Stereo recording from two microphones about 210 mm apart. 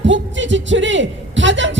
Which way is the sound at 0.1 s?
60° right (ahead or behind).